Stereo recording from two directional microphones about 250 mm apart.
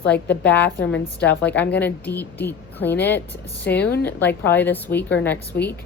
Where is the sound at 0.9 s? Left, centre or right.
Left.